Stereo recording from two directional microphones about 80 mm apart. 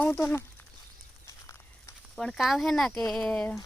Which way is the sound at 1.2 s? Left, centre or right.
Left.